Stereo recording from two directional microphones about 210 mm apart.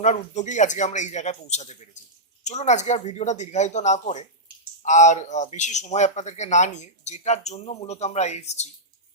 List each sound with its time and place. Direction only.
0.0 s a man's voice: 35° left (ahead or behind)